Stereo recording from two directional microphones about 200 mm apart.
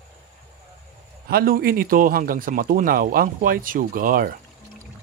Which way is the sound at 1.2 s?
50° right (ahead or behind).